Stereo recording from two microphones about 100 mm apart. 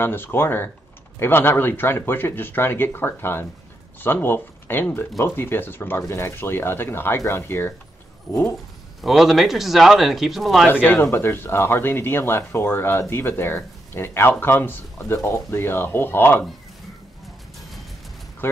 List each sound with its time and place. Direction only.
0.0 s speech: 20° left (ahead or behind)
9.0 s speech: centre (ahead or behind)
10.7 s speech: 20° left (ahead or behind)
18.4 s speech: 20° left (ahead or behind)